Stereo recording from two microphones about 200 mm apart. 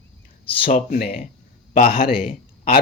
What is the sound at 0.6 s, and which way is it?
A man's voice, 50° left (ahead or behind).